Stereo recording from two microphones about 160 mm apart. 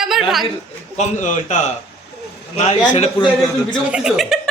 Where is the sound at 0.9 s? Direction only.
50° left (ahead or behind).